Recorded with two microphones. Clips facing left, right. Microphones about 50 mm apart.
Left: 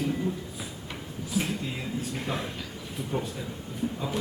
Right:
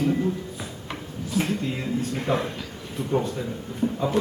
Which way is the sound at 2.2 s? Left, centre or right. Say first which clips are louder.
Right 10 dB; centre.